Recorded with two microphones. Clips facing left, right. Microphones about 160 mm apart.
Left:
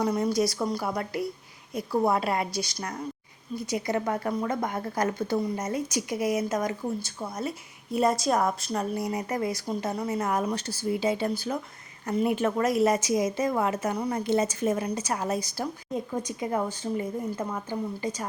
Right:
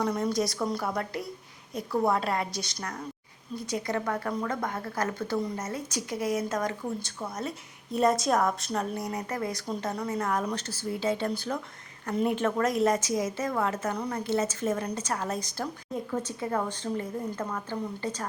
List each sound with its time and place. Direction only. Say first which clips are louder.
0.0 s a woman's voice: left 3 dB; 5° left (ahead or behind)